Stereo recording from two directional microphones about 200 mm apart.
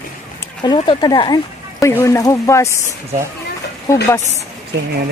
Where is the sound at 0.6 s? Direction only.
20° left (ahead or behind).